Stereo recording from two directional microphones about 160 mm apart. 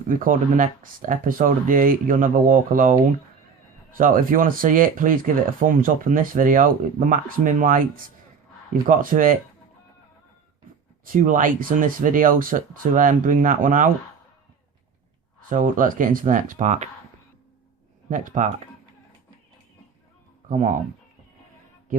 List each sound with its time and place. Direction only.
0.1 s speech: 55° right (ahead or behind)
11.0 s speech: 55° right (ahead or behind)
15.4 s speech: 55° right (ahead or behind)
18.1 s speech: 55° right (ahead or behind)
20.5 s speech: 50° right (ahead or behind)